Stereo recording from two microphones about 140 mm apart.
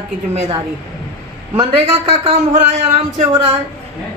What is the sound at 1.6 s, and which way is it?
A woman's voice, 45° right (ahead or behind).